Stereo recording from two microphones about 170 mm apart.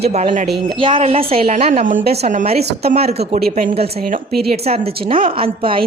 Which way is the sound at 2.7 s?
70° right (ahead or behind).